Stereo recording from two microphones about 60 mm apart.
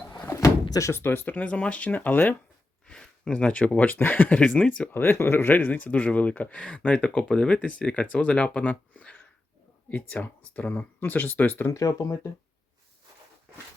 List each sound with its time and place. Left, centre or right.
0.3 s door: left
0.9 s speech: left
2.8 s a sound: centre
3.3 s speech: left
4.4 s speech: centre
4.9 s speech: left; by 9.1 s centre
10.2 s speech: left
11.7 s speech: left